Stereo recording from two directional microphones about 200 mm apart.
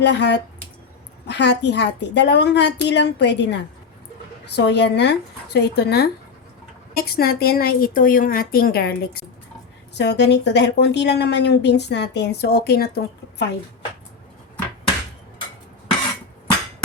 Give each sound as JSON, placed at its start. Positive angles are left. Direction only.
{"t": 0.0, "sound": "a woman's voice", "side_deg": 60}